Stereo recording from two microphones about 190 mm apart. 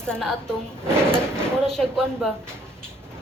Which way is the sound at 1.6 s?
Centre (ahead or behind).